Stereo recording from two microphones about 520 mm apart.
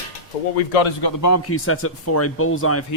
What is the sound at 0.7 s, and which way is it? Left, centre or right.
Speech, left.